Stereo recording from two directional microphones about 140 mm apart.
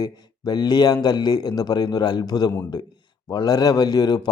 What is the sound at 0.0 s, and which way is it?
A man's voice, 30° left (ahead or behind).